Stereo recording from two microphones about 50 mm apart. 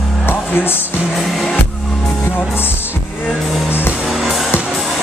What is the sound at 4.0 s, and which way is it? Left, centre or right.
Music, centre.